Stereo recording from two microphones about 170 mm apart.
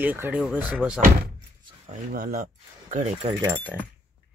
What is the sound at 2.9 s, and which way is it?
Speech, 45° right (ahead or behind).